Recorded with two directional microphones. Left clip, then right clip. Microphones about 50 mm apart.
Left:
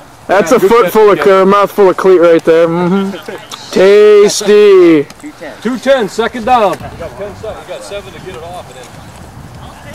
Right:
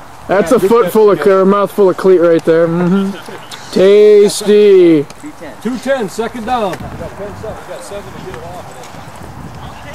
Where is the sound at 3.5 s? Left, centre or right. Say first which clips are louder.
Left 2 dB; left.